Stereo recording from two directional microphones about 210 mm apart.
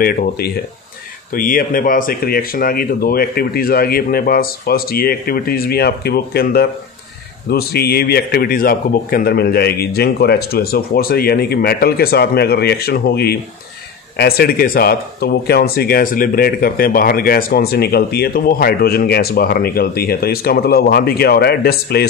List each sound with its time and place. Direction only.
0.0 s speech: 45° left (ahead or behind)